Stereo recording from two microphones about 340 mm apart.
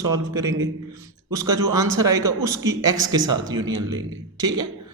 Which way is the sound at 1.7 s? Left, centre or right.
Centre.